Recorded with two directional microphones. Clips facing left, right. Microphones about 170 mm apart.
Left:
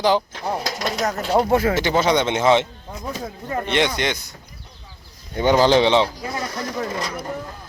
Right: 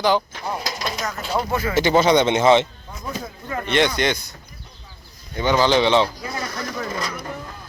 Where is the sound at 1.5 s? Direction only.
70° left (ahead or behind).